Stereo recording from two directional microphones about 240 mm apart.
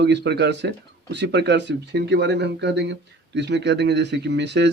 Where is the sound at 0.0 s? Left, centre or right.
Right.